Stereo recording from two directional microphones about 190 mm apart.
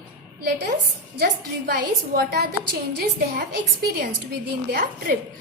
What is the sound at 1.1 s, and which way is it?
A woman's voice, 50° right (ahead or behind).